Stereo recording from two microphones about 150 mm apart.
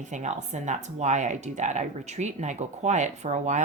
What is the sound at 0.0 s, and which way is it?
Speech, 55° right (ahead or behind).